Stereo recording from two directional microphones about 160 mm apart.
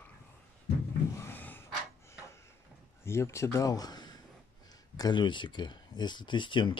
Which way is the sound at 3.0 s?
15° left (ahead or behind).